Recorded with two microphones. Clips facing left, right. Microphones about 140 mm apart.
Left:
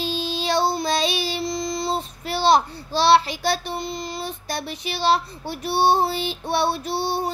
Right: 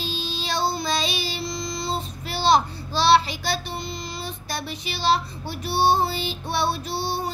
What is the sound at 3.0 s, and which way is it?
A child's voice, 60° left (ahead or behind).